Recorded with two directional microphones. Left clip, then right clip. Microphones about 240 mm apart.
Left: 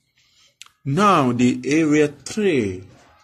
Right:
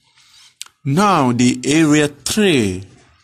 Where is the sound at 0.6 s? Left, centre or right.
Right.